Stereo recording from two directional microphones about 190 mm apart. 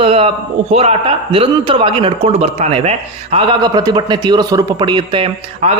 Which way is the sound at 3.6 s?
20° right (ahead or behind).